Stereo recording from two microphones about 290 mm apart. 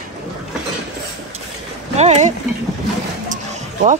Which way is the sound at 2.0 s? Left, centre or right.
Right.